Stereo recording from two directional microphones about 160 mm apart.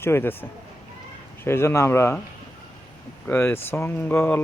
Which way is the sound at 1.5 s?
15° left (ahead or behind).